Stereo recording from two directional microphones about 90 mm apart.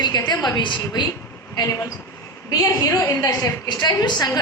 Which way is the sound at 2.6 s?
40° left (ahead or behind).